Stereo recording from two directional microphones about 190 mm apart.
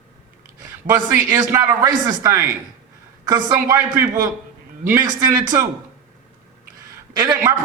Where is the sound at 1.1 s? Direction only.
15° right (ahead or behind).